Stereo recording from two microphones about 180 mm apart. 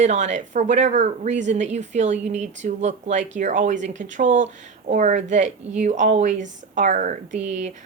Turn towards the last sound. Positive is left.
turn(degrees=-40)  # may be behind; listen again after turning